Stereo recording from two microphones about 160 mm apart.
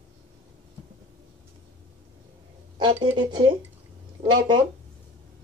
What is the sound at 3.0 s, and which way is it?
Speech, 30° right (ahead or behind).